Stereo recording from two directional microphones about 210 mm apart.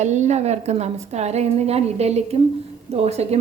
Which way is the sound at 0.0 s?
35° right (ahead or behind).